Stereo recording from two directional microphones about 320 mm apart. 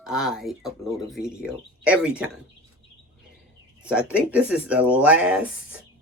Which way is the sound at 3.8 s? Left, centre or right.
Centre.